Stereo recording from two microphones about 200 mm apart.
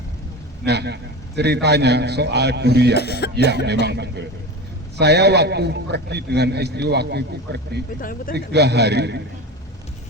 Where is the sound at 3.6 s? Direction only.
55° right (ahead or behind).